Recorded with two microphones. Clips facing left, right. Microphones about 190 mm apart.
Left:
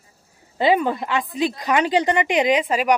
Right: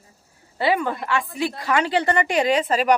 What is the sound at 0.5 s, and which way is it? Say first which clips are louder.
A woman's voice: left 3 dB; 20° left (ahead or behind).